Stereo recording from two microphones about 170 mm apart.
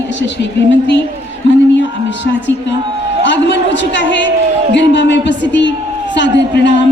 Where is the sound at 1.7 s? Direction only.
90° left.